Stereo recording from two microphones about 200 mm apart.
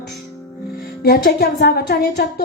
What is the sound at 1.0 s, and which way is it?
A woman's voice, 50° left (ahead or behind).